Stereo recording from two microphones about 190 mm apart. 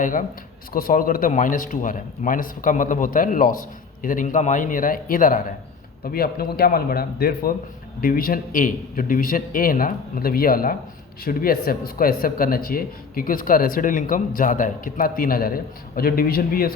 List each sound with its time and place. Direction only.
0.0 s speech: 45° left (ahead or behind)